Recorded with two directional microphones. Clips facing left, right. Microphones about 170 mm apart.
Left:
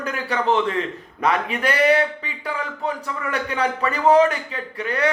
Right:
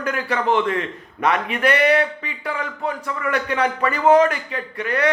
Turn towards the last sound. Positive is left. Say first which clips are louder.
# right 2 dB
turn(degrees=30)  # may be behind; listen again after turning